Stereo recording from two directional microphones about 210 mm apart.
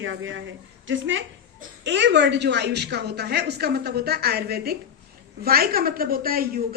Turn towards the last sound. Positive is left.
turn(degrees=-45)  # may be behind; listen again after turning